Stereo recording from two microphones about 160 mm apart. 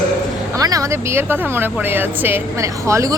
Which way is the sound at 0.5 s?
20° right (ahead or behind).